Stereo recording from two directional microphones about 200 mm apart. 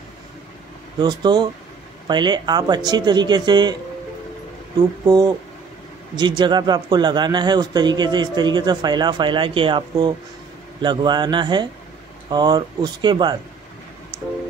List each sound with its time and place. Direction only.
0.9 s a man's voice: 20° right (ahead or behind)
5.0 s a man's voice: 20° right (ahead or behind)